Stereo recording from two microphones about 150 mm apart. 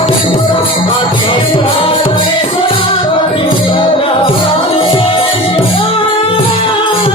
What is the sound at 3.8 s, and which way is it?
Music, 35° left (ahead or behind).